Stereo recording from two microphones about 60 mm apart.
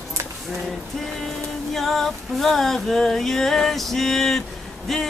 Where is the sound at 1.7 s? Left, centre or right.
Centre.